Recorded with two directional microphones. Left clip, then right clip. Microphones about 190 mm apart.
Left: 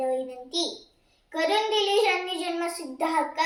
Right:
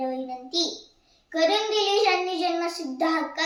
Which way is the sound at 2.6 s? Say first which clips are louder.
Right 2 dB; 10° right (ahead or behind).